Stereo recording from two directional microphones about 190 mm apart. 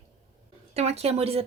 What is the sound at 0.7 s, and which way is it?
Speech, 35° right (ahead or behind).